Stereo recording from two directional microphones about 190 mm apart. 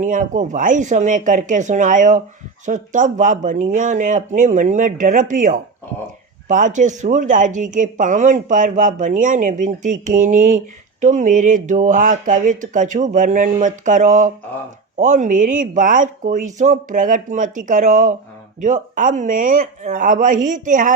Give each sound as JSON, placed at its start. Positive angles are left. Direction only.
{"t": 0.0, "sound": "speech", "side_deg": -40}